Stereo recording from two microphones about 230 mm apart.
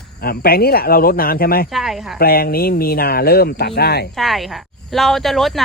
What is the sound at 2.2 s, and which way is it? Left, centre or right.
Speech, left.